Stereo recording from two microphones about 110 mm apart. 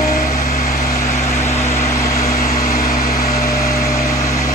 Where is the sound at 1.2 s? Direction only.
25° left (ahead or behind).